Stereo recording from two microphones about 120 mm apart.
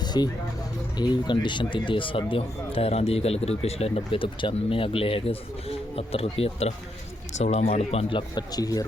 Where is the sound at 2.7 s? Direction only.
55° left (ahead or behind).